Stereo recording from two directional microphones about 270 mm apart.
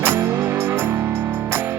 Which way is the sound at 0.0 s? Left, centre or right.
Centre.